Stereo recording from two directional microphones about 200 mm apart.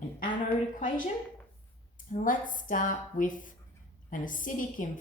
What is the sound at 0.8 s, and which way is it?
Speech, 40° left (ahead or behind).